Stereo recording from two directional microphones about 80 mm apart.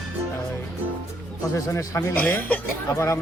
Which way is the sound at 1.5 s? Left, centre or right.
Left.